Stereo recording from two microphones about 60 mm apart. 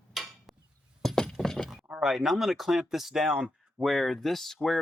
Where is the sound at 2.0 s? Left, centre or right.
Centre.